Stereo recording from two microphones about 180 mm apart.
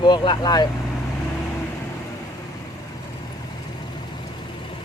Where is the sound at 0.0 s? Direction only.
25° left (ahead or behind).